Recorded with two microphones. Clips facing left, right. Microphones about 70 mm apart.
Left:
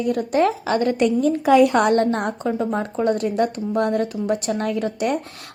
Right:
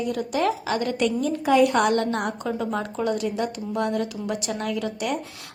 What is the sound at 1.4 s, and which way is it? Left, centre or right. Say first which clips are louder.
A woman's voice: left 3 dB; left.